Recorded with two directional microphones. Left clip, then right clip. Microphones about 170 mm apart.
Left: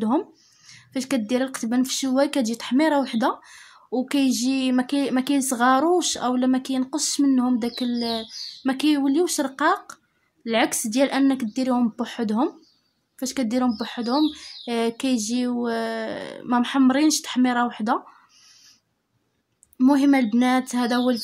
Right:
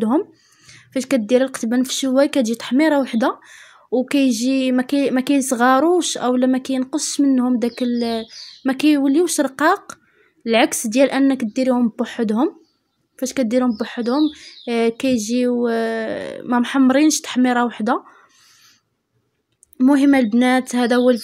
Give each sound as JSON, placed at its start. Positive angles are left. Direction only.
{"t": 0.0, "sound": "speech", "side_deg": -15}
{"t": 19.8, "sound": "speech", "side_deg": -20}